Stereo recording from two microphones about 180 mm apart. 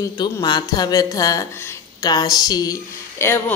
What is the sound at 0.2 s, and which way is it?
A woman's voice, 25° left (ahead or behind).